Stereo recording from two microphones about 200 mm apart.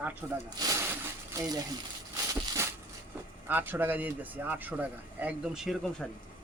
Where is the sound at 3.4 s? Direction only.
10° right (ahead or behind).